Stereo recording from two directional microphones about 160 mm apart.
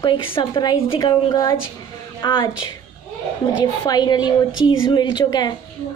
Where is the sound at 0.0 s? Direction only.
30° left (ahead or behind).